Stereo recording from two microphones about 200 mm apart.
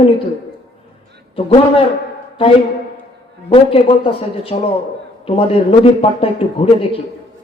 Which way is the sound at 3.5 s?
25° left (ahead or behind).